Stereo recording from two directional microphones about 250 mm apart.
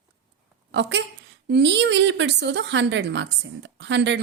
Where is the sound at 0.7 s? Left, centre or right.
Right.